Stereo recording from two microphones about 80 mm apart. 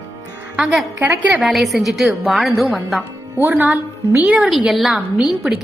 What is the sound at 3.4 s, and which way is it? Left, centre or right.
A woman's voice, right.